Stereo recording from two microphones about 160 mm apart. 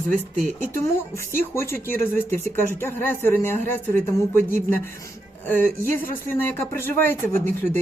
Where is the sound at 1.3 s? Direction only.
15° left (ahead or behind).